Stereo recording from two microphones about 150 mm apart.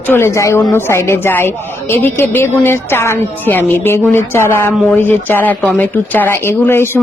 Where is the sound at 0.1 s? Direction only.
15° left (ahead or behind).